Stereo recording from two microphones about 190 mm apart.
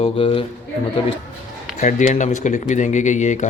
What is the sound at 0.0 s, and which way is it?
Speech, 30° left (ahead or behind).